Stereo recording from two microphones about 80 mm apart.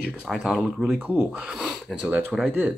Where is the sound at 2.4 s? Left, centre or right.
Right.